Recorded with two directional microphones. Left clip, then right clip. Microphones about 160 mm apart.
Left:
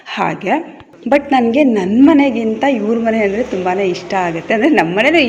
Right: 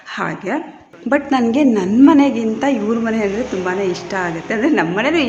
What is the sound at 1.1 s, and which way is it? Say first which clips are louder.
A man's voice: left 4 dB; 5° left (ahead or behind).